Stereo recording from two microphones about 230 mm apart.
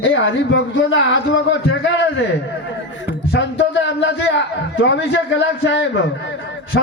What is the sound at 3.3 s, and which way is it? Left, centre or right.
A man's voice, left.